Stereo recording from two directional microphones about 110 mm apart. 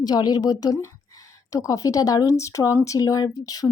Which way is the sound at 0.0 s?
40° left (ahead or behind).